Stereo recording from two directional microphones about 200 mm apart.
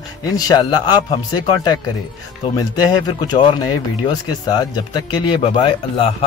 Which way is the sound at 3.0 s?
20° left (ahead or behind).